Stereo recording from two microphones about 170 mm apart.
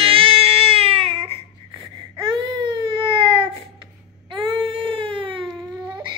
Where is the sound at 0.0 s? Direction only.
30° right (ahead or behind).